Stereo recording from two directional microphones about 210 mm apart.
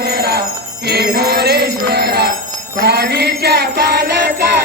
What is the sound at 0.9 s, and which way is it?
Jingle bell, 50° right (ahead or behind).